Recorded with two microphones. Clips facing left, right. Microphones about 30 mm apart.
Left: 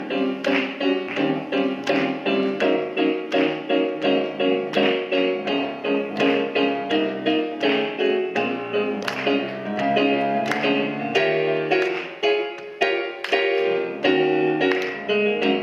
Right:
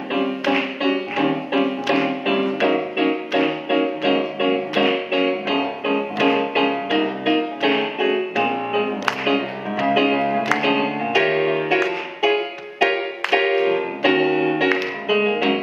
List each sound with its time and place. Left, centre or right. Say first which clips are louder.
0.1 s music: right 2 dB; right
9.0 s music: right 2 dB; right
11.7 s music: right 1 dB; right